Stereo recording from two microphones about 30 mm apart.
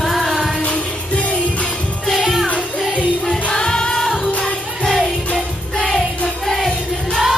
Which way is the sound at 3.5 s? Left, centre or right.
Left.